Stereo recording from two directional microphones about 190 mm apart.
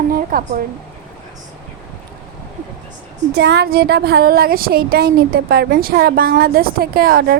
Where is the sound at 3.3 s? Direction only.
65° right (ahead or behind).